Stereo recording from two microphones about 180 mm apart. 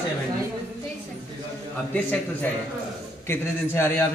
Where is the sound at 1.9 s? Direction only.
10° left (ahead or behind).